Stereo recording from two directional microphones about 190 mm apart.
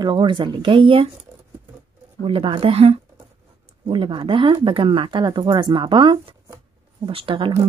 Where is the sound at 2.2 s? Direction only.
25° right (ahead or behind).